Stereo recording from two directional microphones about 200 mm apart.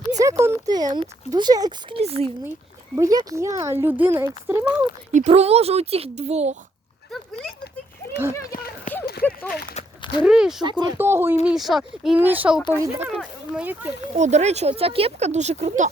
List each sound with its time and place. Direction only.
0.1 s a sound: 15° right (ahead or behind)
0.7 s speech: 20° right (ahead or behind)
2.0 s speech: 30° right (ahead or behind)
2.9 s speech: 15° right (ahead or behind)
5.1 s speech: 35° right (ahead or behind)
8.3 s speech: 15° left (ahead or behind)
8.5 s speech: 45° left (ahead or behind)
9.2 s speech: 10° left (ahead or behind)
10.2 s speech: 5° right (ahead or behind)
10.6 s speech: 20° right (ahead or behind)
10.9 s speech: 10° right (ahead or behind)
11.4 s speech: centre (ahead or behind)
14.2 s speech: 35° right (ahead or behind)